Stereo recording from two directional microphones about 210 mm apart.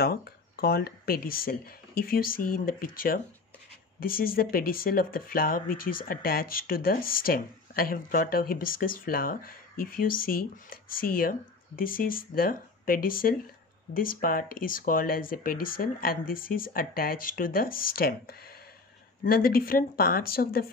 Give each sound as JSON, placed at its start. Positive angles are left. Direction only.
{"t": 0.0, "sound": "speech", "side_deg": 50}